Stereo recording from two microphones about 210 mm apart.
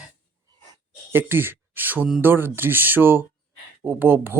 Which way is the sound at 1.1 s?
10° right (ahead or behind).